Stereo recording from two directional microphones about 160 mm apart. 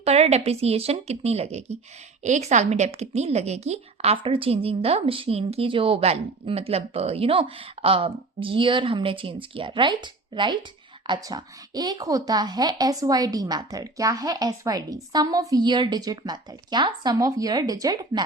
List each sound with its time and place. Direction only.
0.0 s a woman's voice: 40° right (ahead or behind); by 18.2 s 25° right (ahead or behind)